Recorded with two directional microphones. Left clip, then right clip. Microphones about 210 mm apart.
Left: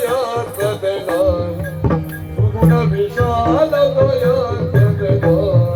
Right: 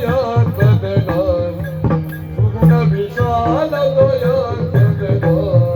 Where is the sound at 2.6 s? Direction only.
40° right (ahead or behind).